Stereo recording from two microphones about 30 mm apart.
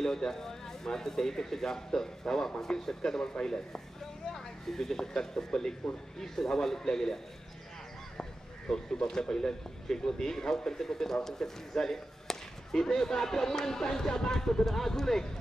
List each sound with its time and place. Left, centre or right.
0.0 s a man's voice: centre
4.3 s speech: centre
8.2 s speech: left